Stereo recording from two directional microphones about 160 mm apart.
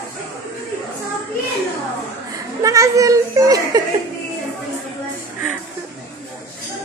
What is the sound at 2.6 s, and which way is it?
Child singing, 20° right (ahead or behind).